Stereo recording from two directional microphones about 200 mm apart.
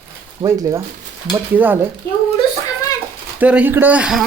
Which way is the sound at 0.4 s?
20° right (ahead or behind).